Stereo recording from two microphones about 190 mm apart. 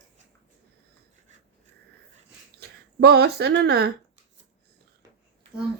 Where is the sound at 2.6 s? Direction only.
55° right (ahead or behind).